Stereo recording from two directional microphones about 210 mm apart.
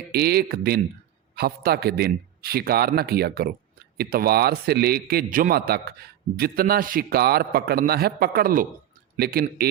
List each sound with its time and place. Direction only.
0.1 s a man's voice: 50° right (ahead or behind)